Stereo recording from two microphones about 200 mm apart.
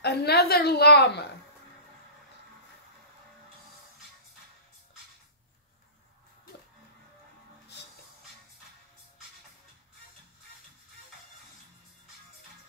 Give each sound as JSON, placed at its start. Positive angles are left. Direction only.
{"t": 0.0, "sound": "a woman's voice", "side_deg": 55}